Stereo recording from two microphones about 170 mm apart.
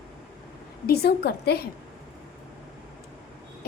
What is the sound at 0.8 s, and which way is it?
Speech, 65° left (ahead or behind).